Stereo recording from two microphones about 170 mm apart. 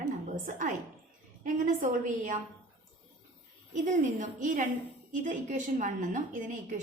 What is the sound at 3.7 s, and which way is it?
A woman's voice, 50° right (ahead or behind).